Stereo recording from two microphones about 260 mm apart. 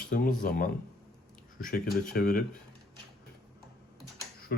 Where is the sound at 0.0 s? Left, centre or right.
Left.